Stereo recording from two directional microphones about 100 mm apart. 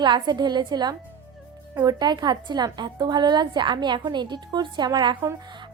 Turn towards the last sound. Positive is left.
turn(degrees=-50)  # may be behind; listen again after turning